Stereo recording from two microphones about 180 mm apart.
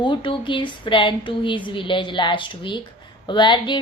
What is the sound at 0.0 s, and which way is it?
Speech, 25° left (ahead or behind).